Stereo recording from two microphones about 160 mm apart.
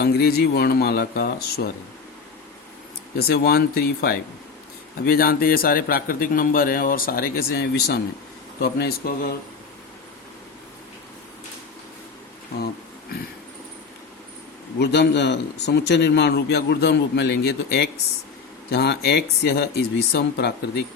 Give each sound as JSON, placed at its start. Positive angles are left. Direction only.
{"t": 0.0, "sound": "speech", "side_deg": 75}
{"t": 3.2, "sound": "a man's voice", "side_deg": 75}
{"t": 8.6, "sound": "speech", "side_deg": 75}
{"t": 14.8, "sound": "speech", "side_deg": 90}